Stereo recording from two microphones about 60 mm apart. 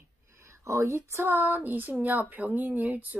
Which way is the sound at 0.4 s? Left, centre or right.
Right.